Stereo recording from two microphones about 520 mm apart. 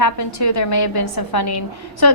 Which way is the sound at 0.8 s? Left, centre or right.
Left.